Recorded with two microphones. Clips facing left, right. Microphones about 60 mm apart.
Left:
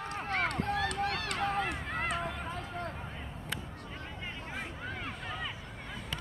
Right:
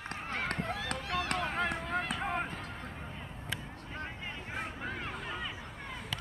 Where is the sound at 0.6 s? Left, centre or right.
Left.